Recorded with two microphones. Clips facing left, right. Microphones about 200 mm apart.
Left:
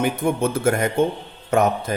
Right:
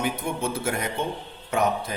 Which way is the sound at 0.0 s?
50° left (ahead or behind).